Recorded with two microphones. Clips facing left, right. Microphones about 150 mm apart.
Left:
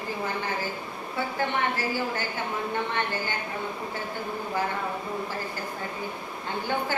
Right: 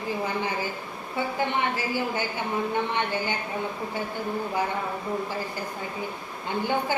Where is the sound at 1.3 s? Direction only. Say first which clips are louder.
Even; 15° right (ahead or behind).